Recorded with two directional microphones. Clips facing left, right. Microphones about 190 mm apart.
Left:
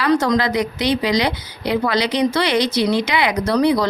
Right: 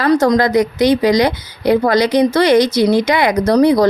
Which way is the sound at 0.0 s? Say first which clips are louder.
Right 5 dB; 40° right (ahead or behind).